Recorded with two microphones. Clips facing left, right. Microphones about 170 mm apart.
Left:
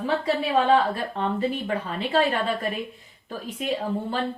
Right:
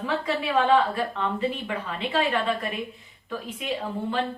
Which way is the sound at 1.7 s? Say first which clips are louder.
Left 3 dB; 40° left (ahead or behind).